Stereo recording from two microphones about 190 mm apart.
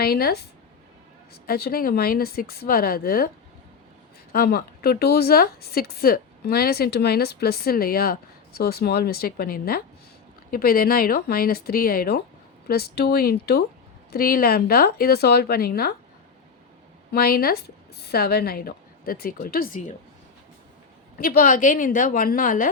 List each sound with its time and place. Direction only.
0.0 s speech: 55° left (ahead or behind)
1.5 s speech: 55° left (ahead or behind)
17.1 s speech: 50° left (ahead or behind)
21.2 s speech: 50° left (ahead or behind)